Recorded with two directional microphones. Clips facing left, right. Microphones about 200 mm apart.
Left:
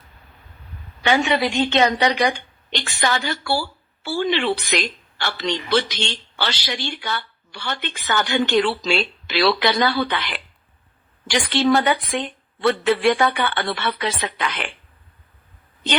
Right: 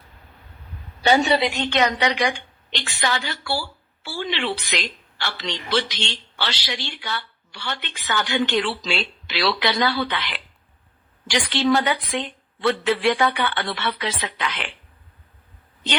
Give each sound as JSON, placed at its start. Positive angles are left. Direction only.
{"t": 1.0, "sound": "a woman's voice", "side_deg": -40}
{"t": 1.7, "sound": "a woman's voice", "side_deg": 30}